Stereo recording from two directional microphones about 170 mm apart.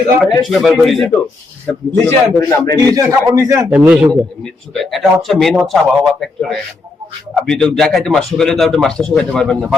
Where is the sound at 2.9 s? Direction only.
15° right (ahead or behind).